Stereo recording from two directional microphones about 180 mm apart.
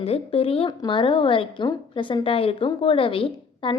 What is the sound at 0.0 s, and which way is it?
A woman's voice, 35° left (ahead or behind).